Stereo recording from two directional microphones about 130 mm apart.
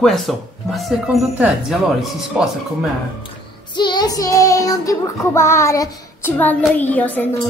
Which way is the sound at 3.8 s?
35° left (ahead or behind).